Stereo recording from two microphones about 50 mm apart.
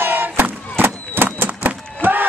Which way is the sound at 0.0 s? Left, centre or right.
Right.